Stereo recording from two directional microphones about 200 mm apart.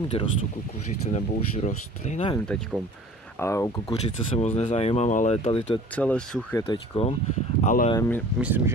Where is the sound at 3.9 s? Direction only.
30° left (ahead or behind).